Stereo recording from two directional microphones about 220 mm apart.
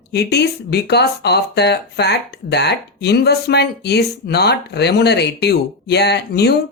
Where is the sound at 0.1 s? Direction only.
50° left (ahead or behind).